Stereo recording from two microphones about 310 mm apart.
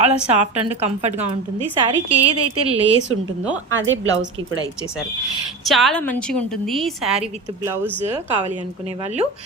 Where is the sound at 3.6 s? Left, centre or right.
Right.